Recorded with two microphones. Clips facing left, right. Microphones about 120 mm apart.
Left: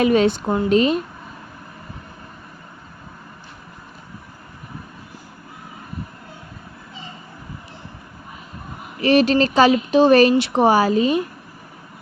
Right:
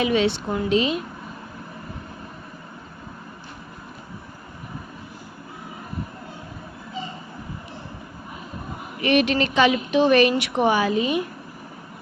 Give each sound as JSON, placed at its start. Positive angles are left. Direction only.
{"t": 0.0, "sound": "a woman's voice", "side_deg": 45}
{"t": 9.0, "sound": "speech", "side_deg": 35}